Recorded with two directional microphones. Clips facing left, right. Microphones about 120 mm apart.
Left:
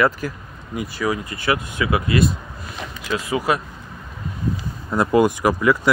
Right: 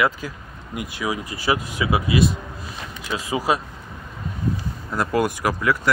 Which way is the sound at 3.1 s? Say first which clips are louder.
Left 1 dB; 15° right (ahead or behind).